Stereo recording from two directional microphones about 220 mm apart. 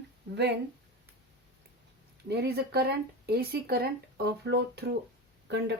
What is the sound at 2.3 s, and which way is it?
Speech, 45° right (ahead or behind).